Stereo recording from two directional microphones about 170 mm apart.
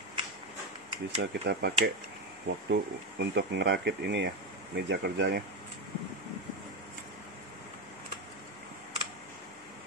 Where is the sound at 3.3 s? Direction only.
90° right; by 5.4 s 70° right (ahead or behind).